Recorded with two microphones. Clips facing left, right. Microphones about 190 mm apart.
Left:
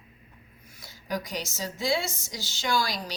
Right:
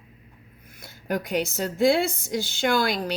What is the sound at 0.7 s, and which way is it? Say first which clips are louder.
A woman's voice: right 4 dB; 55° right (ahead or behind).